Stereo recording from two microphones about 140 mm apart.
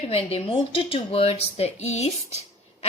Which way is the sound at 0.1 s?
45° left (ahead or behind).